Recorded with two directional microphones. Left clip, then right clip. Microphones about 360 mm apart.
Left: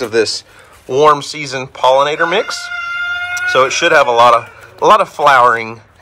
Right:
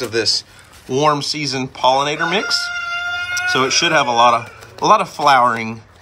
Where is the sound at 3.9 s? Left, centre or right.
Left.